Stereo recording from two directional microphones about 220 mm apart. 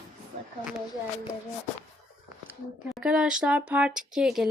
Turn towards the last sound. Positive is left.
turn(degrees=0)  # may be behind; listen again after turning